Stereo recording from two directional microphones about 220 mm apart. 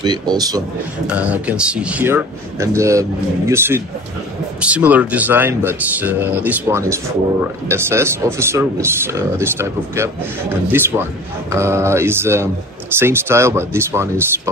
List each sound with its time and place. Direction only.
0.0 s a man's voice: 20° right (ahead or behind)
1.0 s a man's voice: 5° right (ahead or behind)